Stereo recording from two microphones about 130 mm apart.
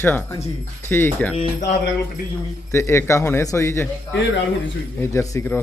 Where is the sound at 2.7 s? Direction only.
20° left (ahead or behind).